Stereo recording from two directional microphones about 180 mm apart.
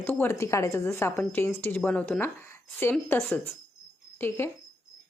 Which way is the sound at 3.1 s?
5° left (ahead or behind).